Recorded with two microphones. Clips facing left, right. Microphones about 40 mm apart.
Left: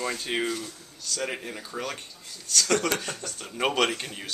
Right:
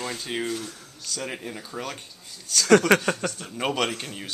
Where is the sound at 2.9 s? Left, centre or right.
Right.